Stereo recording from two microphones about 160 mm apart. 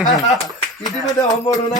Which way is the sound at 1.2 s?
25° left (ahead or behind).